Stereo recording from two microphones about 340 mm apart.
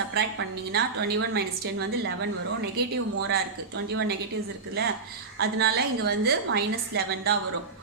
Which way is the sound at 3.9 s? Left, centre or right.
Right.